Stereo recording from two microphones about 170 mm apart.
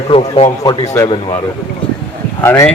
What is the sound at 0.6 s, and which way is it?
Speech, 20° left (ahead or behind).